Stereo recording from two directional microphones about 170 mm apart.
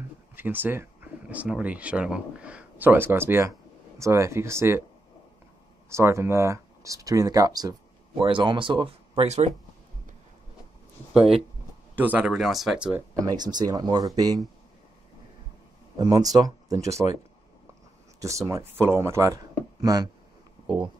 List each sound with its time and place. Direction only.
0.4 s speech: 10° right (ahead or behind)
5.9 s speech: 15° right (ahead or behind); by 9.5 s 40° right (ahead or behind)
11.1 s speech: centre (ahead or behind)
13.2 s speech: 25° right (ahead or behind)
16.0 s speech: 20° right (ahead or behind)
18.2 s speech: 20° right (ahead or behind)